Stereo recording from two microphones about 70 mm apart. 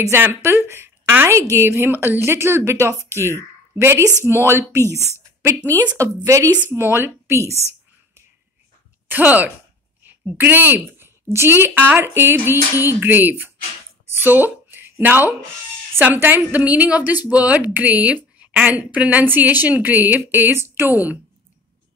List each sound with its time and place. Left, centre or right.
0.1 s speech: right
6.0 s speech: right
6.7 s speech: right
9.1 s a woman's voice: right